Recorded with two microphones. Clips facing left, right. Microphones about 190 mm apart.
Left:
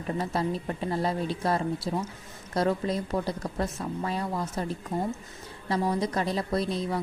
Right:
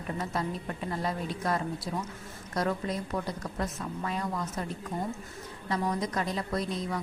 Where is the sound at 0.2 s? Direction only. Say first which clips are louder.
Left 4 dB; 30° left (ahead or behind).